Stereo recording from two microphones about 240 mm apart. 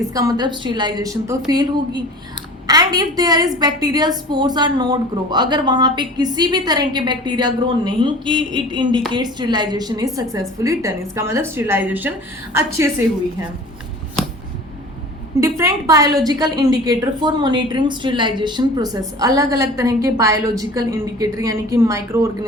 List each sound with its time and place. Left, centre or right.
0.1 s a woman's voice: centre
15.4 s a woman's voice: centre